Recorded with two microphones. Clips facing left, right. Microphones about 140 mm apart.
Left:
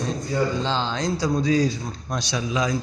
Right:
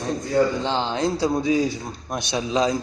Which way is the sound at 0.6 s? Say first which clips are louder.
Right 2 dB; 20° right (ahead or behind).